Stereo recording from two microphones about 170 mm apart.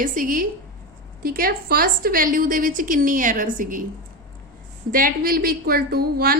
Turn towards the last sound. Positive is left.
turn(degrees=-65)  # may be behind; listen again after turning